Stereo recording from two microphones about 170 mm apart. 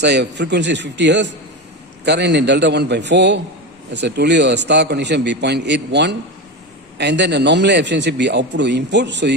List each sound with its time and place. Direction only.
0.0 s a man's voice: 90° right